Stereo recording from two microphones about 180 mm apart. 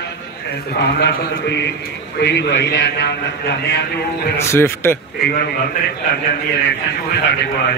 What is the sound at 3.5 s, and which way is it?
Speech, 65° left (ahead or behind).